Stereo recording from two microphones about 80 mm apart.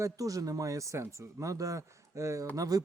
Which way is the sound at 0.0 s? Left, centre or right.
Right.